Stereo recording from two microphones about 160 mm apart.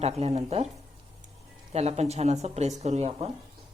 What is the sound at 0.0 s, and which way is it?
Speech, 40° right (ahead or behind).